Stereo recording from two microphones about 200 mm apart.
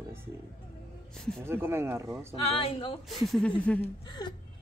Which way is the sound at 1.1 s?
Centre (ahead or behind).